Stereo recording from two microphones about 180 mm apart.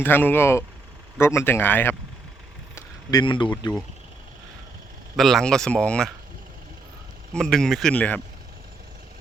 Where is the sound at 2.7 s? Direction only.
25° left (ahead or behind).